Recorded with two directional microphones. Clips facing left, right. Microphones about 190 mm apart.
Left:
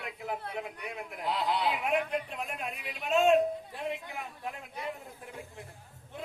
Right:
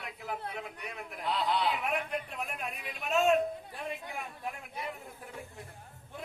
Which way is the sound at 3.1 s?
25° left (ahead or behind).